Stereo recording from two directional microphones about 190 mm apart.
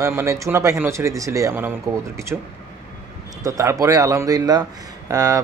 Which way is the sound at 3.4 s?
15° right (ahead or behind).